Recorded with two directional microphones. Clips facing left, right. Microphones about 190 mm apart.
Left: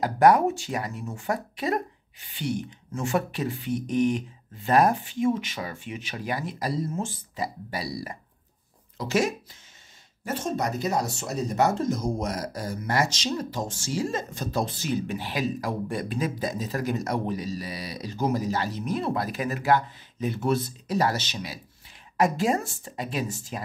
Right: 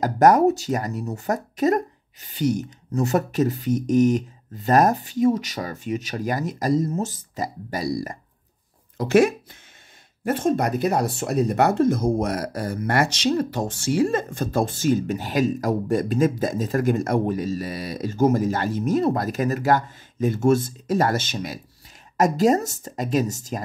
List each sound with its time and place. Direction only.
0.0 s speech: 40° right (ahead or behind)
8.9 s speech: 55° right (ahead or behind)